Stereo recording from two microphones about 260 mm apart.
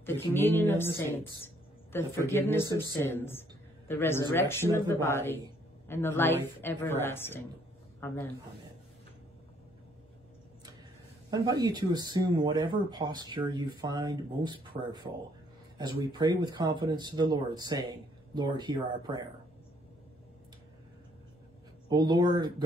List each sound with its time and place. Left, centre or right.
0.0 s a woman's voice: centre
11.2 s speech: centre
21.8 s speech: centre